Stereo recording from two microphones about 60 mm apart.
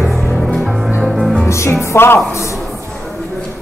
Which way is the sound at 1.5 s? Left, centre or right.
Left.